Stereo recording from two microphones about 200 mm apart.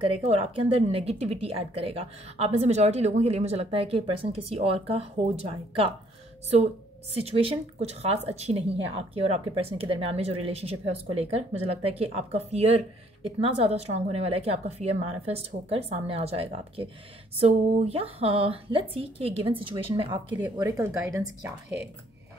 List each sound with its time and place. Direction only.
0.0 s speech: 30° right (ahead or behind)
7.2 s speech: 30° right (ahead or behind)